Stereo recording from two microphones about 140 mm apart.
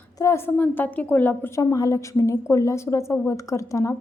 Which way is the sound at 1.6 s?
25° left (ahead or behind).